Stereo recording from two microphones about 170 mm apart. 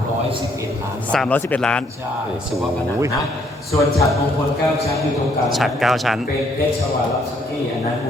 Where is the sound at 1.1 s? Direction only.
5° left (ahead or behind).